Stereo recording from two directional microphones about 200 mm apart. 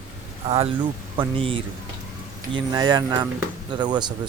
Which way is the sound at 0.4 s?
30° right (ahead or behind).